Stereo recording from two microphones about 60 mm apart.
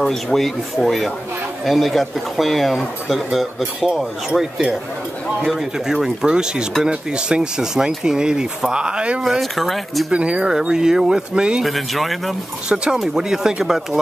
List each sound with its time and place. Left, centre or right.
0.0 s speech: centre
9.2 s speech: centre
10.1 s speech: centre
11.6 s speech: centre
12.6 s speech: centre